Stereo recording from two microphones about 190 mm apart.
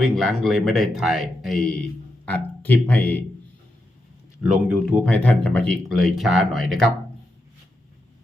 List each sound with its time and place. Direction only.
0.0 s a man's voice: centre (ahead or behind)
4.7 s a man's voice: centre (ahead or behind)